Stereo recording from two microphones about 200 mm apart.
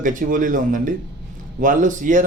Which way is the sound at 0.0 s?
40° right (ahead or behind).